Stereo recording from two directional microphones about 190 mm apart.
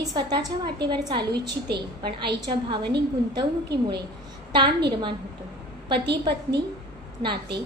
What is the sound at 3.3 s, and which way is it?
Speech, 20° right (ahead or behind).